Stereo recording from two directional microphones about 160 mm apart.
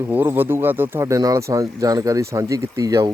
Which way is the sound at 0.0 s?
10° right (ahead or behind).